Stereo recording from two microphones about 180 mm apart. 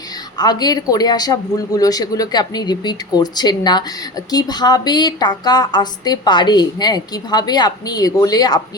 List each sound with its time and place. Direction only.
0.3 s a woman's voice: 20° left (ahead or behind)